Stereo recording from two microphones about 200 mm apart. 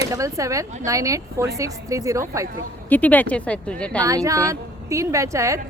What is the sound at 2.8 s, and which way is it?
Speech, 10° left (ahead or behind).